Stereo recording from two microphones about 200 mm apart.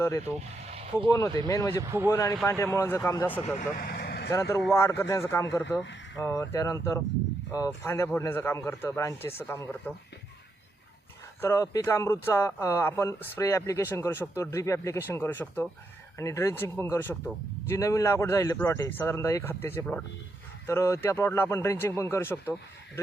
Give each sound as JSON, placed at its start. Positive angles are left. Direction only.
{"t": 0.0, "sound": "speech", "side_deg": 15}
{"t": 1.4, "sound": "speech", "side_deg": 15}
{"t": 1.8, "sound": "speech", "side_deg": -15}
{"t": 2.0, "sound": "speech", "side_deg": 15}
{"t": 3.4, "sound": "speech", "side_deg": 40}
{"t": 4.3, "sound": "speech", "side_deg": 15}
{"t": 11.3, "sound": "speech", "side_deg": 15}